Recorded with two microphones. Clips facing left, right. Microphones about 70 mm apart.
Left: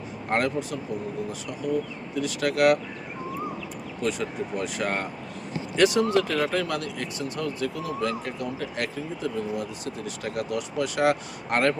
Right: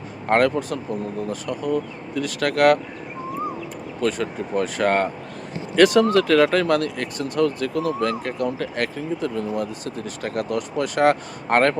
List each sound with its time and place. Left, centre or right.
0.3 s speech: right
4.0 s speech: right